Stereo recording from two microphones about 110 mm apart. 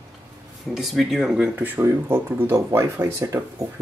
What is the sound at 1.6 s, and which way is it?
Speech, 20° right (ahead or behind).